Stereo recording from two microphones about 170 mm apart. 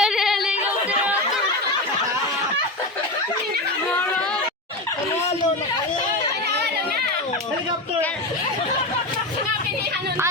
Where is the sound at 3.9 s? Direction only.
10° left (ahead or behind).